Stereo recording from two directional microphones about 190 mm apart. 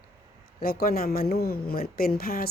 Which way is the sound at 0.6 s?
50° left (ahead or behind).